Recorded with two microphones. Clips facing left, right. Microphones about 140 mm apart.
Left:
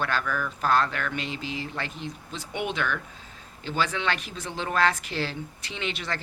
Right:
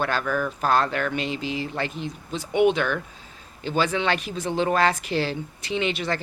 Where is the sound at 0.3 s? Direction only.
35° right (ahead or behind).